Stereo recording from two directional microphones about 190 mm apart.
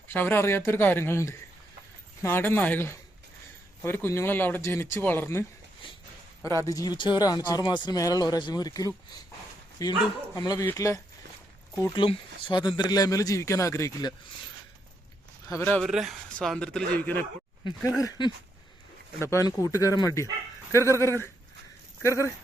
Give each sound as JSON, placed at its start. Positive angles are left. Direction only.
{"t": 0.1, "sound": "speech", "side_deg": 10}
{"t": 5.8, "sound": "speech", "side_deg": 25}
{"t": 11.8, "sound": "speech", "side_deg": 25}
{"t": 15.4, "sound": "speech", "side_deg": 10}
{"t": 15.9, "sound": "a man's voice", "side_deg": 0}
{"t": 17.6, "sound": "speech", "side_deg": 25}
{"t": 19.2, "sound": "speech", "side_deg": 15}